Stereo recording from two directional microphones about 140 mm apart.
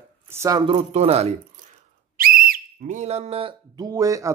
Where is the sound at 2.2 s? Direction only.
90° right; by 3.5 s 45° right (ahead or behind).